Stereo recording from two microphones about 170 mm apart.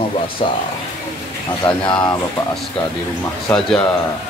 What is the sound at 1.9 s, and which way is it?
Speech, 25° left (ahead or behind).